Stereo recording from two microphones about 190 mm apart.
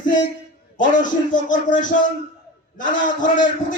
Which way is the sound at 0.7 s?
45° left (ahead or behind).